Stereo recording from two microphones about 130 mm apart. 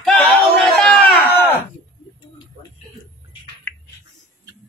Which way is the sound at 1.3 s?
15° left (ahead or behind).